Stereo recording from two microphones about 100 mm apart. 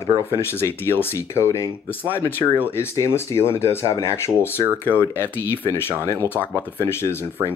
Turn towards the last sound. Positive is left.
turn(degrees=25)  # may be behind; listen again after turning